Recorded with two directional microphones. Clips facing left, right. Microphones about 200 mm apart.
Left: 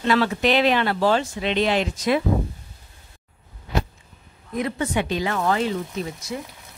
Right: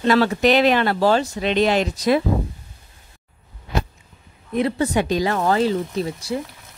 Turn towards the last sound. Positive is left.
turn(degrees=-30)  # may be behind; listen again after turning